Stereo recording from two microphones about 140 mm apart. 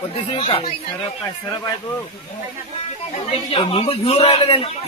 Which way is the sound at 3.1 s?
40° left (ahead or behind).